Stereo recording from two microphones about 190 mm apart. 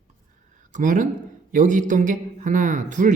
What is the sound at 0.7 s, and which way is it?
A man's voice, 40° right (ahead or behind).